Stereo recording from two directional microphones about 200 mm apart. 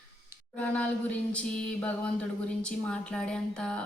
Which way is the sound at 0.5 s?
5° left (ahead or behind).